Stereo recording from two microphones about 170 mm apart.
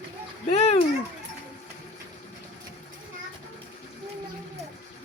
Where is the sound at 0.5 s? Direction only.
40° left (ahead or behind).